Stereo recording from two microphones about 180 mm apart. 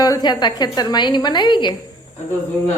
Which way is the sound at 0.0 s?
20° left (ahead or behind).